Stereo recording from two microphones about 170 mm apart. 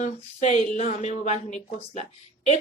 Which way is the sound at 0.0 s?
45° left (ahead or behind).